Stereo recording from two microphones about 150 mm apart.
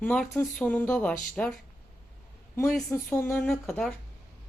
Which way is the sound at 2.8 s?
20° left (ahead or behind).